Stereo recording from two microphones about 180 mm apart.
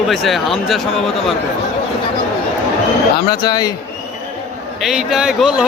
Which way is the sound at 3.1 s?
20° left (ahead or behind).